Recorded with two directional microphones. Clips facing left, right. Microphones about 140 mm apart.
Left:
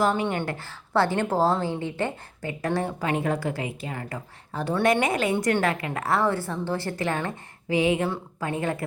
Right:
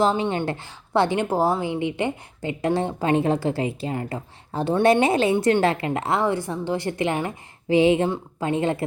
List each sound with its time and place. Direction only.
0.0 s a woman's voice: 25° right (ahead or behind)
7.7 s a woman's voice: 30° right (ahead or behind)